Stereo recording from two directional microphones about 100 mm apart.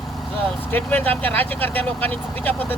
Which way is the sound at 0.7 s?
15° left (ahead or behind).